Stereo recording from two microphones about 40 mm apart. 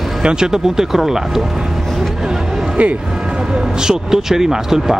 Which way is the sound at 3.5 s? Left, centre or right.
Centre.